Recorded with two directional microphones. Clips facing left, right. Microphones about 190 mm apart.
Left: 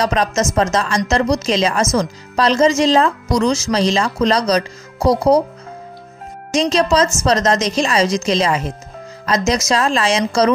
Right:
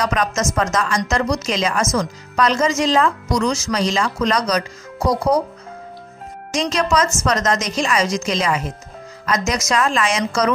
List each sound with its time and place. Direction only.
0.0 s a woman's voice: 30° left (ahead or behind)
6.5 s a woman's voice: 25° left (ahead or behind)